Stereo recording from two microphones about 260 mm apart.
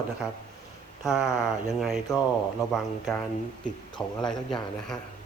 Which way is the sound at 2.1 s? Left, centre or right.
Centre.